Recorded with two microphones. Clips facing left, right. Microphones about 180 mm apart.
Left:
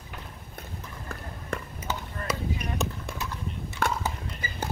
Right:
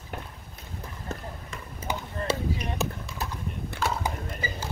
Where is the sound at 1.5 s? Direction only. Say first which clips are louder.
Left 8 dB; 60° left (ahead or behind).